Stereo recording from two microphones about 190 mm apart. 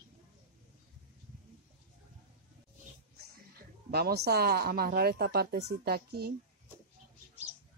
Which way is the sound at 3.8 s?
55° right (ahead or behind).